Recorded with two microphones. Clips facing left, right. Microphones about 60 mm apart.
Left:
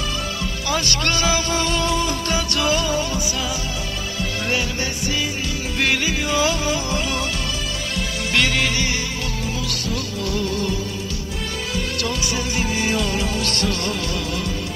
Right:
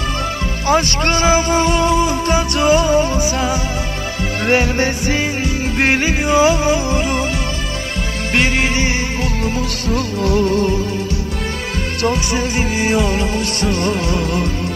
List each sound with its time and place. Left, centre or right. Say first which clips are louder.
0.7 s speech: right 8 dB; right
4.5 s music: right 11 dB; right
8.4 s speech: right 4 dB; right
9.8 s music: right 10 dB; right
12.0 s music: right 11 dB; right